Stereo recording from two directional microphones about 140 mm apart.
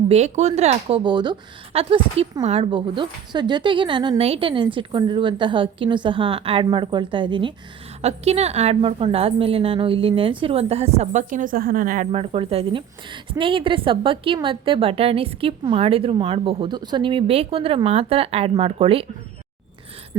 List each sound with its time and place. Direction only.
0.1 s a woman's voice: 50° right (ahead or behind)
2.6 s a woman's voice: 35° right (ahead or behind)
8.0 s a woman's voice: 50° right (ahead or behind); by 12.0 s 75° right (ahead or behind)
12.1 s a woman's voice: 40° right (ahead or behind)